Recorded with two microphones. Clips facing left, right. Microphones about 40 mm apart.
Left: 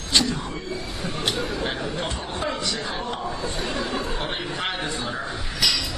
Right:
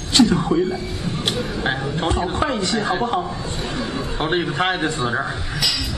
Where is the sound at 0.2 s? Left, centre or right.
Right.